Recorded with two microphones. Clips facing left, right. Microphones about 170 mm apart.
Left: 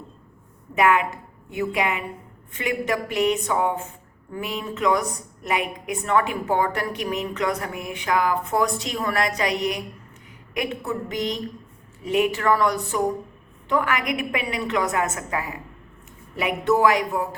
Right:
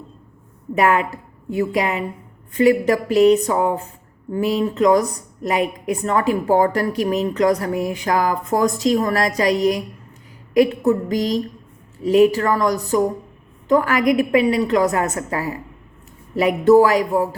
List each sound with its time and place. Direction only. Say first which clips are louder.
0.8 s a woman's voice: right 2 dB; 35° right (ahead or behind)